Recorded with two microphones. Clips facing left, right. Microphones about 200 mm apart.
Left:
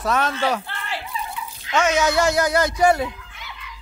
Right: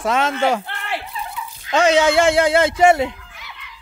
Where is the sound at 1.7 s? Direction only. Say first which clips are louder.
Right 4 dB; 30° right (ahead or behind).